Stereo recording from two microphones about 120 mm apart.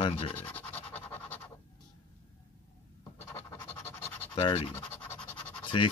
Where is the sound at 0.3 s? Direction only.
15° left (ahead or behind).